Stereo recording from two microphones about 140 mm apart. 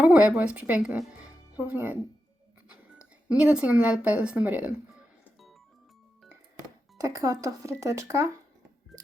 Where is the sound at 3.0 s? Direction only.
10° right (ahead or behind).